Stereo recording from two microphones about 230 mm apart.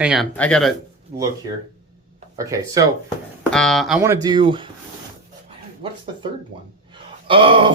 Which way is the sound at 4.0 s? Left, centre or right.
Centre.